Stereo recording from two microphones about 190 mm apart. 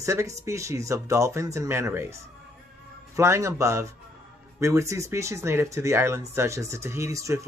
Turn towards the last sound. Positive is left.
turn(degrees=-15)  # may be behind; listen again after turning